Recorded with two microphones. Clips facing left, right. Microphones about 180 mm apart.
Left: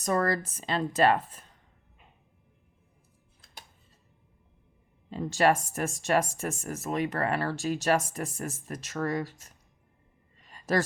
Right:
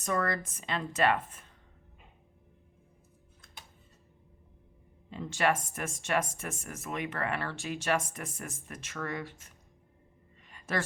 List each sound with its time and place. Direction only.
0.0 s speech: 35° left (ahead or behind)
5.1 s speech: 35° left (ahead or behind)
10.4 s a sound: 35° left (ahead or behind)